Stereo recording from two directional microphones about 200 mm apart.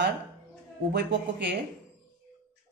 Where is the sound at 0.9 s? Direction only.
60° right (ahead or behind).